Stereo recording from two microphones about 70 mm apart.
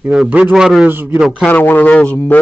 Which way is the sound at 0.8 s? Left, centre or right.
Right.